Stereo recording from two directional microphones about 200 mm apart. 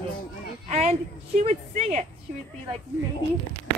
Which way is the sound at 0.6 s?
35° right (ahead or behind).